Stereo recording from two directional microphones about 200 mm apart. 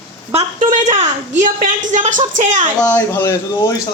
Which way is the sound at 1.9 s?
40° right (ahead or behind).